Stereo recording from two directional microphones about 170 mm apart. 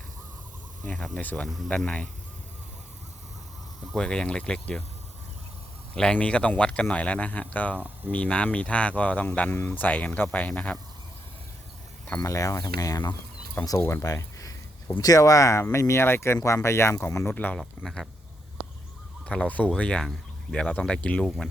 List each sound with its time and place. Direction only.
0.9 s speech: 5° left (ahead or behind)
3.9 s speech: 5° left (ahead or behind)
5.9 s speech: 5° left (ahead or behind)
7.8 s speech: 10° right (ahead or behind)
8.1 s speech: 5° left (ahead or behind)
12.0 s speech: 15° left (ahead or behind)
19.2 s speech: 5° left (ahead or behind)